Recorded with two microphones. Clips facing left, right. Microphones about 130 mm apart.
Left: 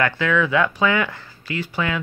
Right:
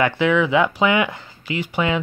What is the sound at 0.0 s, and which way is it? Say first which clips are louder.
Speech: right 3 dB; 15° right (ahead or behind).